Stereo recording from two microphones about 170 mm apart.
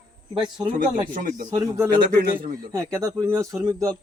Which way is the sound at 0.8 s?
55° right (ahead or behind).